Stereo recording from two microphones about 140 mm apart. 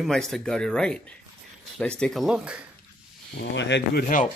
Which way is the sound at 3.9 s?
70° left (ahead or behind).